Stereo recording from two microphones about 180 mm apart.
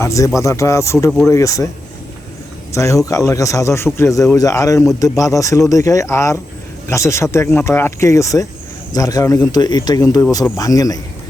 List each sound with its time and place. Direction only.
0.0 s speech: 15° left (ahead or behind)
2.7 s speech: 15° left (ahead or behind)